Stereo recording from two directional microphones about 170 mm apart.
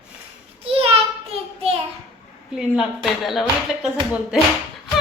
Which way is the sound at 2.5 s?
5° right (ahead or behind).